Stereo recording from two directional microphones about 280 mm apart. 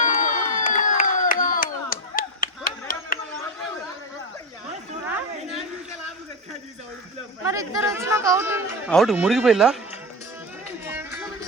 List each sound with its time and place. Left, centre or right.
0.0 s crowd: left
7.4 s chatter: centre
8.9 s speech: centre
10.8 s music: centre